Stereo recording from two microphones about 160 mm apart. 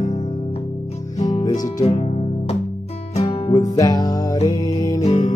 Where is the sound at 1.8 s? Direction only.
40° left (ahead or behind).